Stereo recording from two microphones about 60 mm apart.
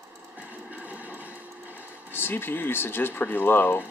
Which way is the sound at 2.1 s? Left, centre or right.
Left.